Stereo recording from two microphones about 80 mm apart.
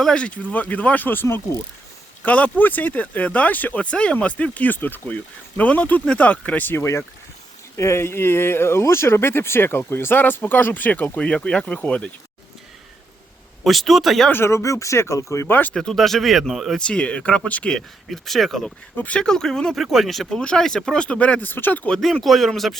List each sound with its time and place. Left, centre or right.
0.0 s speech: centre
13.7 s speech: centre
14.3 s speech: left
15.7 s speech: centre
16.8 s speech: centre
17.7 s speech: centre
18.9 s speech: centre
21.9 s speech: centre